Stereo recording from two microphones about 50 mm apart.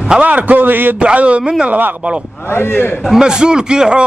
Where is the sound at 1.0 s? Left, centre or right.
Right.